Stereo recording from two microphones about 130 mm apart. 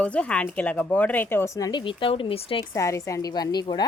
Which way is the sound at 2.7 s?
25° left (ahead or behind).